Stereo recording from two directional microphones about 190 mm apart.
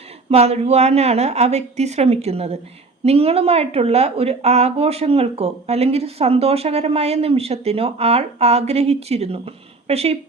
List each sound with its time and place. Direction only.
0.3 s a woman's voice: 35° right (ahead or behind)